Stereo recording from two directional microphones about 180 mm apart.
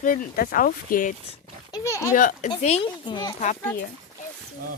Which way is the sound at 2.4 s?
35° left (ahead or behind).